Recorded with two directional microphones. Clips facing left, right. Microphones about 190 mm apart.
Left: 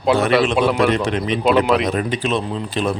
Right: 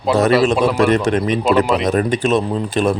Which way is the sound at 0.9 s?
45° right (ahead or behind).